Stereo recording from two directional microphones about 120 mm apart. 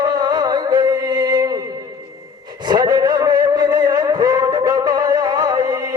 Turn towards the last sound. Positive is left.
turn(degrees=-35)  # may be behind; listen again after turning